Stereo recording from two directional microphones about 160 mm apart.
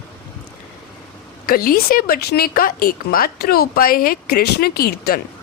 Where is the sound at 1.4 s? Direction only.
70° left (ahead or behind).